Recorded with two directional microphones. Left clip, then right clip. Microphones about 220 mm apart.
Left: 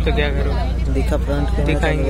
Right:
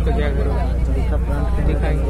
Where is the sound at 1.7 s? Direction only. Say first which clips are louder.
Left 7 dB; 25° left (ahead or behind).